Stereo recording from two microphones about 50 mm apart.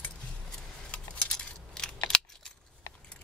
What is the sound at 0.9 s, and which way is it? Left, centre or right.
Coin, left.